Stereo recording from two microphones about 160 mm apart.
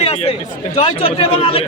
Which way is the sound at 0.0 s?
35° left (ahead or behind).